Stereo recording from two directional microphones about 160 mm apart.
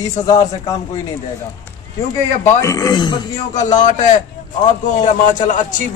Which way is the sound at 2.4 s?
20° left (ahead or behind).